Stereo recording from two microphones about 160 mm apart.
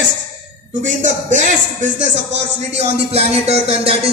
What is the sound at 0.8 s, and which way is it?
A man's voice, 50° right (ahead or behind).